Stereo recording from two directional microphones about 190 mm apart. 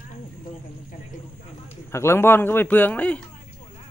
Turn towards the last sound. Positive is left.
turn(degrees=5)  # may be behind; listen again after turning